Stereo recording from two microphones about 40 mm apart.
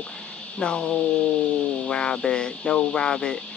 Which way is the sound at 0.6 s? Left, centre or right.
Left.